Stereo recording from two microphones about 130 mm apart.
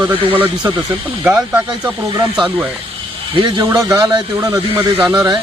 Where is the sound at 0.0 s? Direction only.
15° right (ahead or behind).